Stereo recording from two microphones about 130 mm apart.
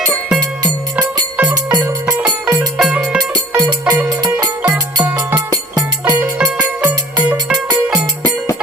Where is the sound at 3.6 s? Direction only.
35° right (ahead or behind).